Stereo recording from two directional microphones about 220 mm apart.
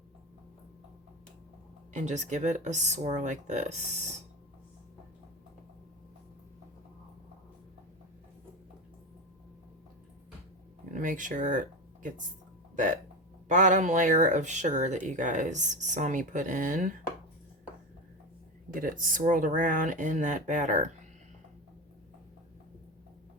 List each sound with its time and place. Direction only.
1.9 s speech: 35° right (ahead or behind)
10.9 s speech: 35° right (ahead or behind)
12.7 s speech: 35° right (ahead or behind)
18.7 s speech: 40° right (ahead or behind)